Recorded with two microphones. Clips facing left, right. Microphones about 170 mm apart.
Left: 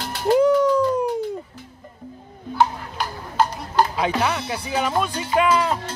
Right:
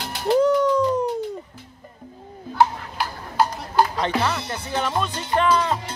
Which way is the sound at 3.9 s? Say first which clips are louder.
Left 1 dB; 10° left (ahead or behind).